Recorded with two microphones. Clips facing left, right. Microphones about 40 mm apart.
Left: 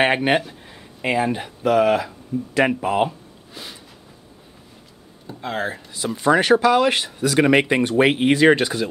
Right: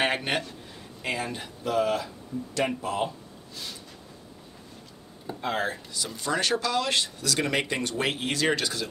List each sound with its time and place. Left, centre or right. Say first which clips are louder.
0.0 s speech: left 8 dB; left
1.6 s speech: left 9 dB; left
2.3 s speech: left 8 dB; left
2.7 s speech: left 9 dB; left
3.1 s a sound: left 5 dB; left
5.2 s speech: left 3 dB; centre
6.2 s speech: left 12 dB; left